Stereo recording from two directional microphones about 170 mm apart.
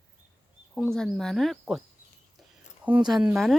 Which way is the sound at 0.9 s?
5° left (ahead or behind).